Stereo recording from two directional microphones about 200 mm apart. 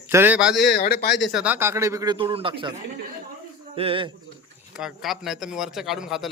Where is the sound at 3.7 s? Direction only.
25° right (ahead or behind).